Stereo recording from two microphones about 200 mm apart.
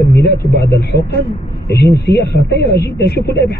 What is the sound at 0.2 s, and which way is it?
A man's voice, 55° left (ahead or behind).